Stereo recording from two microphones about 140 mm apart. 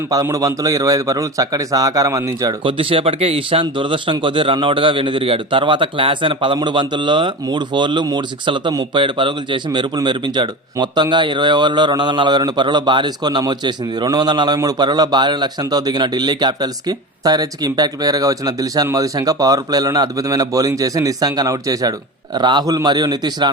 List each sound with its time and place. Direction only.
0.1 s a man's voice: 25° right (ahead or behind)
2.6 s speech: 40° right (ahead or behind)